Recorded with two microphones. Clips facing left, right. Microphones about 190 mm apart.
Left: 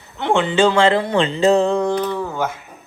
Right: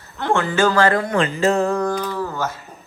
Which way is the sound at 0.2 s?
20° left (ahead or behind).